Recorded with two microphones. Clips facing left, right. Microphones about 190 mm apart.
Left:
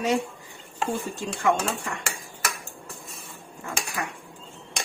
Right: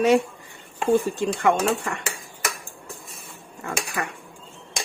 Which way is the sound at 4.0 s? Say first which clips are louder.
Right 2 dB; 65° right (ahead or behind).